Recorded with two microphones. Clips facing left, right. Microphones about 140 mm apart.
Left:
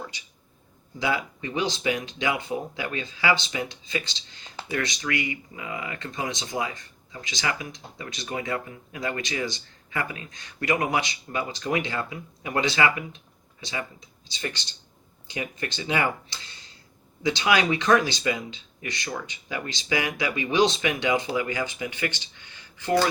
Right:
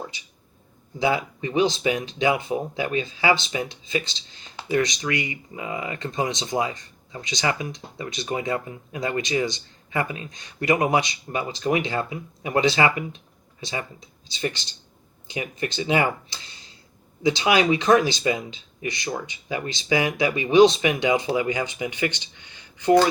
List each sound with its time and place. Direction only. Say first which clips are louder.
0.9 s speech: right 4 dB; 25° right (ahead or behind)
15.3 s speech: right 3 dB; 25° right (ahead or behind)
17.2 s speech: right 3 dB; 20° right (ahead or behind)